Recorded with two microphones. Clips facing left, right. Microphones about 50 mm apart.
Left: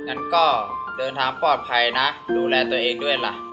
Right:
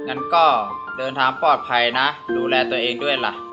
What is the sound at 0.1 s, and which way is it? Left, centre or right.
Speech, centre.